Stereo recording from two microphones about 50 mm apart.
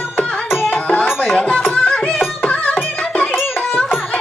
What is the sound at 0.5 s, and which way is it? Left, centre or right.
Music, left.